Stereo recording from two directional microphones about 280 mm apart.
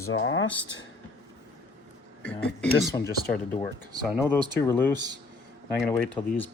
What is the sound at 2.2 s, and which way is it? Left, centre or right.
Speech, centre.